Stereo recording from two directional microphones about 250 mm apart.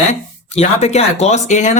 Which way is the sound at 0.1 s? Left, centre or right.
Left.